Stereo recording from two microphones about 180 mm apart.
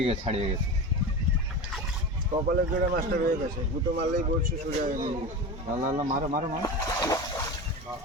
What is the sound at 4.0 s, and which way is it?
Speech, 50° right (ahead or behind).